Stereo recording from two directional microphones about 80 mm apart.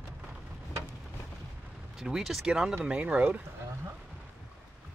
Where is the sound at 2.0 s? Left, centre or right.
Centre.